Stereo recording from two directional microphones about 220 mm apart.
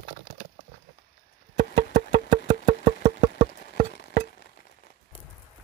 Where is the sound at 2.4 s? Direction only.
35° right (ahead or behind).